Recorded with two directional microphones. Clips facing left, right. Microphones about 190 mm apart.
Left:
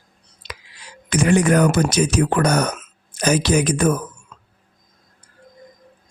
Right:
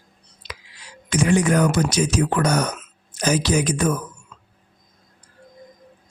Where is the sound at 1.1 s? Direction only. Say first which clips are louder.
Left 2 dB; 55° left (ahead or behind).